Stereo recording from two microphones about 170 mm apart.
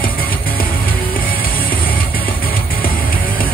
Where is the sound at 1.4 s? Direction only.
60° left (ahead or behind).